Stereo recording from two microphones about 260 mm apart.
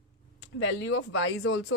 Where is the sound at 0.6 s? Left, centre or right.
Left.